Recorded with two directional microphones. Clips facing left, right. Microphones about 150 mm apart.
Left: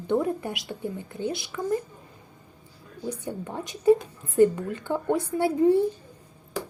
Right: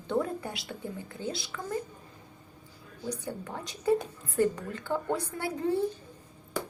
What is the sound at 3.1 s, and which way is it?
A woman's voice, 20° left (ahead or behind).